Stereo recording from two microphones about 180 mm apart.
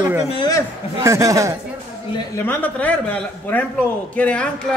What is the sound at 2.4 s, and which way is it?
A man's voice, 10° left (ahead or behind).